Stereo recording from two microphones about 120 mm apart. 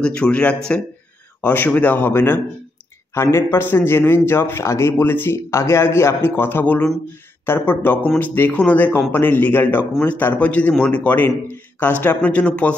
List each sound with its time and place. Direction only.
0.0 s a man's voice: 10° left (ahead or behind)